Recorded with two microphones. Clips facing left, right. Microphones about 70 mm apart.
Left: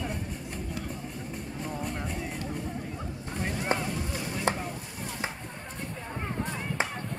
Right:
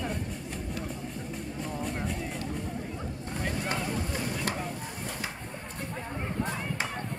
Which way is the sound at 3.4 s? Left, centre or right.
Left.